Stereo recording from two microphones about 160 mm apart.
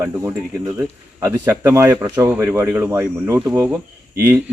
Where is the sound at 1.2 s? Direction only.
15° right (ahead or behind).